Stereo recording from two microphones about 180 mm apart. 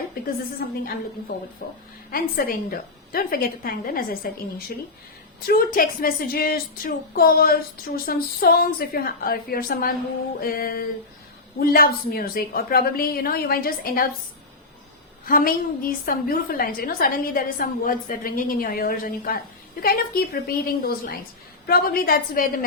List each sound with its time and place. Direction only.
0.2 s a sound: 55° left (ahead or behind)
0.6 s a woman's voice: 60° left (ahead or behind)
15.3 s a woman's voice: 50° left (ahead or behind)